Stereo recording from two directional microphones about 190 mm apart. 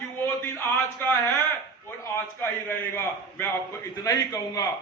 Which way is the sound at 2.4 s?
10° left (ahead or behind).